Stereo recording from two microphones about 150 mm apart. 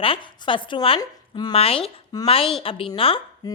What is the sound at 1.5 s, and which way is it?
A woman's voice, 40° left (ahead or behind).